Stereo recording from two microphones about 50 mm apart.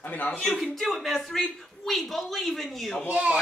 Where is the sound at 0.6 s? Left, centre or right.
Centre.